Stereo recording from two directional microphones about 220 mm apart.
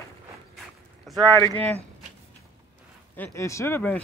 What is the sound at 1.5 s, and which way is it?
Speech, 30° right (ahead or behind).